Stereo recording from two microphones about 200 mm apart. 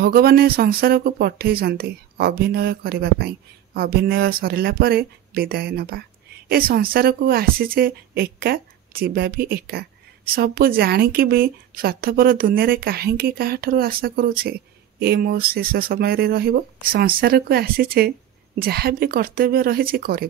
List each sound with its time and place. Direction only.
0.0 s speech: 50° right (ahead or behind)